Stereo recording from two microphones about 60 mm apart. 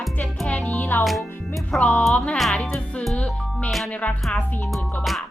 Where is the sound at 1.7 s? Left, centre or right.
Left.